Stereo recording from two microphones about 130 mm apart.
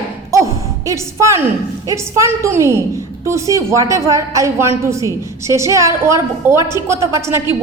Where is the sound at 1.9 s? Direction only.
25° right (ahead or behind).